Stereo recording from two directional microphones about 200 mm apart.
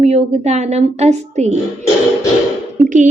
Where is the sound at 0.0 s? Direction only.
35° right (ahead or behind).